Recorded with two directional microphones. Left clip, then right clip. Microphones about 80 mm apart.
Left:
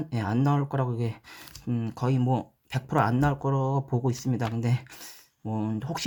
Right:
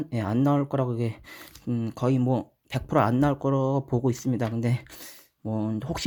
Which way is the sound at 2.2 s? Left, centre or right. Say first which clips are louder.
Right 1 dB; right.